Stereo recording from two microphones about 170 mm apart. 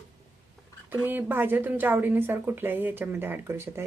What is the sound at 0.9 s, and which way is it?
A woman's voice, 10° right (ahead or behind).